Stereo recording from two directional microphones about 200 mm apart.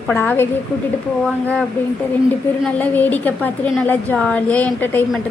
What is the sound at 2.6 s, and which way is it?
A woman's voice, 10° left (ahead or behind).